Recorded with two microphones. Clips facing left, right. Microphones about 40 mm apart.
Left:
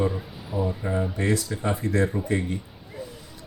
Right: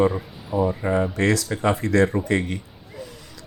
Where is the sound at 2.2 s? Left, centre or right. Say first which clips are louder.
Right 3 dB; right.